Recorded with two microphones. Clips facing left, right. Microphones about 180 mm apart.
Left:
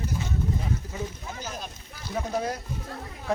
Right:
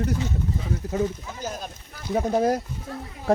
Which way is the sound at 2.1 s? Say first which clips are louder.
Right 8 dB; 45° right (ahead or behind).